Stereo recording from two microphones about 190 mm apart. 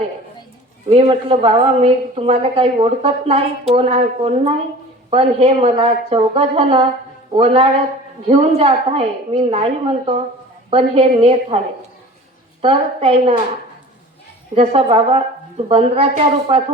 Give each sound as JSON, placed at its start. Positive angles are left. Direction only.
{"t": 0.9, "sound": "a woman's voice", "side_deg": -30}
{"t": 10.7, "sound": "a woman's voice", "side_deg": -30}
{"t": 12.6, "sound": "a woman's voice", "side_deg": -30}
{"t": 14.5, "sound": "a woman's voice", "side_deg": -30}